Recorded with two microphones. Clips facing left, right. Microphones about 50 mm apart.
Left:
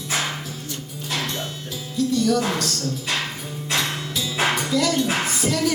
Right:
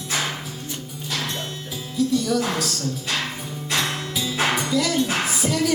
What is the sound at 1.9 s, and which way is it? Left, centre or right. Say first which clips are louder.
Speech: left 1 dB; centre.